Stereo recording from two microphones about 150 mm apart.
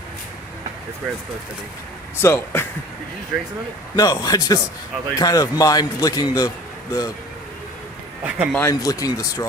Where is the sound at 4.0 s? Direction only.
25° left (ahead or behind).